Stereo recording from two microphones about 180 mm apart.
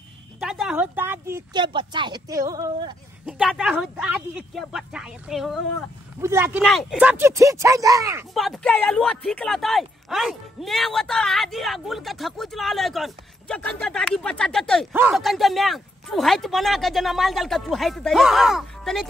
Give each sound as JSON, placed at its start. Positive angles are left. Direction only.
{"t": 0.4, "sound": "speech", "side_deg": -5}
{"t": 3.3, "sound": "speech", "side_deg": -5}
{"t": 6.2, "sound": "speech", "side_deg": -10}
{"t": 6.6, "sound": "speech", "side_deg": 0}
{"t": 8.4, "sound": "speech", "side_deg": 5}
{"t": 14.9, "sound": "speech", "side_deg": -10}